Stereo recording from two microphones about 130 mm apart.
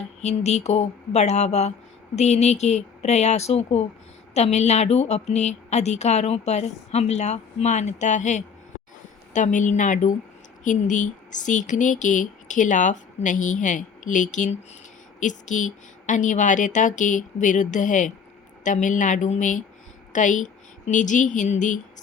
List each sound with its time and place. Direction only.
0.2 s a woman's voice: 60° left (ahead or behind)